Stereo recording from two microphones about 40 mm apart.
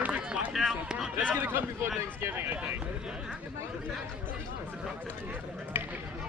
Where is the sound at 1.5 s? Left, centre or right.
Right.